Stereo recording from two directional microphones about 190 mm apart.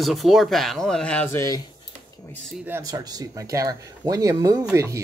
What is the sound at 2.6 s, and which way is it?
Speech, 15° right (ahead or behind).